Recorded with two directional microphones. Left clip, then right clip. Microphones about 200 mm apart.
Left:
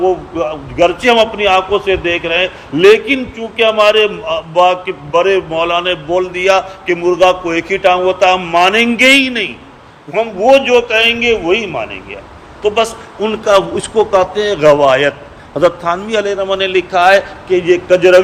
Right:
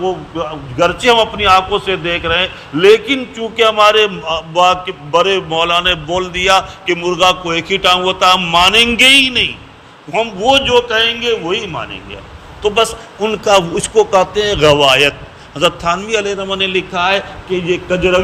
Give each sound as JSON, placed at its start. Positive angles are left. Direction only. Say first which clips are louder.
{"t": 0.0, "sound": "a man's voice", "louder": "left 5 dB", "side_deg": -10}
{"t": 12.6, "sound": "a man's voice", "louder": "even", "side_deg": -20}